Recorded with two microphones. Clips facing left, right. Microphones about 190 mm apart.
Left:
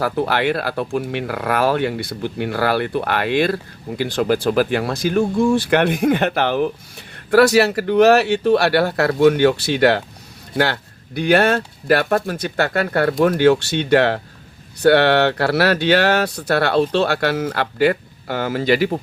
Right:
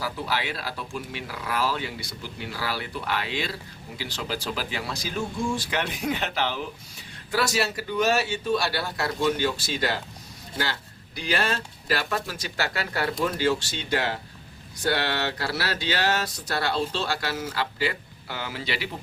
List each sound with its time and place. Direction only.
0.0 s speech: 60° left (ahead or behind)